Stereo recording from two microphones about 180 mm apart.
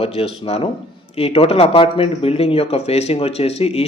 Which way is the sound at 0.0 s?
35° left (ahead or behind).